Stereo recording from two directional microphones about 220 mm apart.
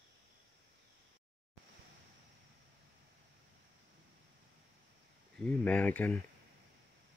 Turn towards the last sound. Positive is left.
turn(degrees=5)  # may be behind; listen again after turning